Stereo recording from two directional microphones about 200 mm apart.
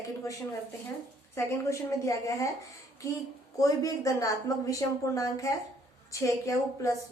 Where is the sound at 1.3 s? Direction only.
15° left (ahead or behind).